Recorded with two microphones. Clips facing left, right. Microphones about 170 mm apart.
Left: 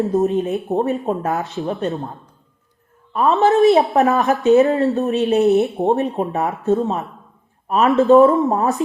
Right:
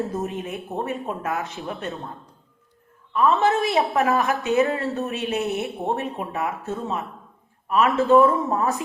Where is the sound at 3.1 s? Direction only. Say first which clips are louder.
Left 4 dB; 40° left (ahead or behind).